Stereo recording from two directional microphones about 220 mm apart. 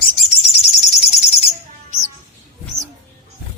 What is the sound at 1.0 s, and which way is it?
Bird, 30° left (ahead or behind).